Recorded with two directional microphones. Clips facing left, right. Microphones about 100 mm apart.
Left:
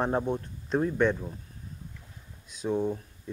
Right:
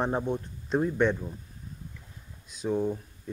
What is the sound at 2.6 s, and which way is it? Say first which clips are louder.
Speech: even; 15° left (ahead or behind).